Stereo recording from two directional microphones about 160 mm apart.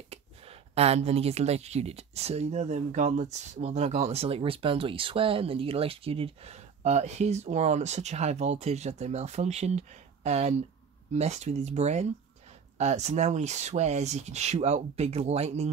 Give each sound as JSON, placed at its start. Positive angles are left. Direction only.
{"t": 0.1, "sound": "speech", "side_deg": -40}